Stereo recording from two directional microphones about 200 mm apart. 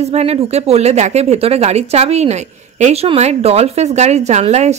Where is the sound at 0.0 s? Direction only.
30° right (ahead or behind).